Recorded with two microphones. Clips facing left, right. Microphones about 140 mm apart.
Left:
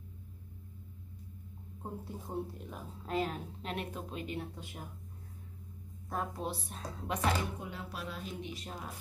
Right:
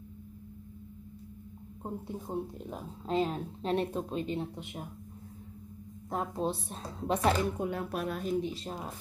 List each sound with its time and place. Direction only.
1.8 s a woman's voice: 20° right (ahead or behind)
6.0 s a woman's voice: 25° right (ahead or behind)
7.6 s speech: 55° right (ahead or behind); by 8.9 s 30° right (ahead or behind)